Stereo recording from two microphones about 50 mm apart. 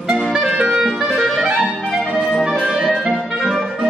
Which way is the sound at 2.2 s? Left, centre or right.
Centre.